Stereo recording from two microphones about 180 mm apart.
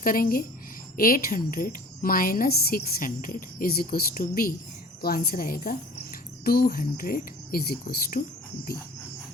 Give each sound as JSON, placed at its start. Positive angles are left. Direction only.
{"t": 0.0, "sound": "a woman's voice", "side_deg": 50}